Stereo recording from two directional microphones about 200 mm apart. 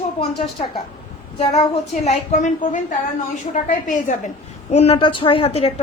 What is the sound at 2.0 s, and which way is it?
A woman's voice, 40° left (ahead or behind).